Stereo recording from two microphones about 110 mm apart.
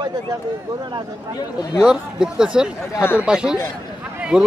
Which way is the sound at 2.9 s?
20° left (ahead or behind).